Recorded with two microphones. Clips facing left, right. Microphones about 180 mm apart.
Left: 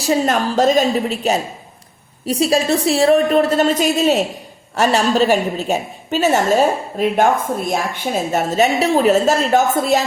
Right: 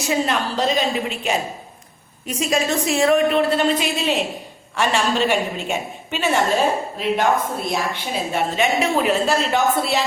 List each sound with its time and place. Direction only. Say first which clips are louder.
0.0 s a woman's voice: left 4 dB; 40° left (ahead or behind)